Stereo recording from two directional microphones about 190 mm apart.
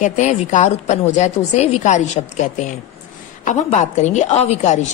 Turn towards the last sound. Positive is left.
turn(degrees=35)  # may be behind; listen again after turning